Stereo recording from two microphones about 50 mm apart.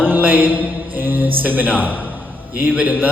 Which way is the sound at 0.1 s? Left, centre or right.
Right.